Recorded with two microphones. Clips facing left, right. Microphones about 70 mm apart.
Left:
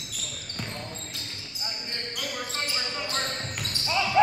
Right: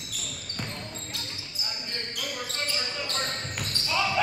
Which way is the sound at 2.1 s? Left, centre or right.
Centre.